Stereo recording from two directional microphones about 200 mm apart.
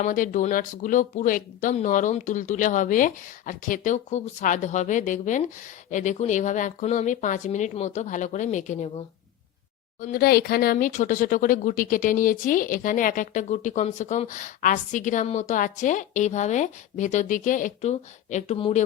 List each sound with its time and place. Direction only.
0.0 s speech: 40° left (ahead or behind)
10.0 s speech: 45° left (ahead or behind)